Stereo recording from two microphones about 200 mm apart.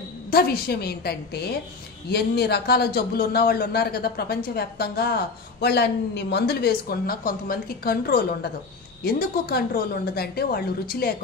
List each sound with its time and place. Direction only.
0.3 s a man's voice: 50° left (ahead or behind)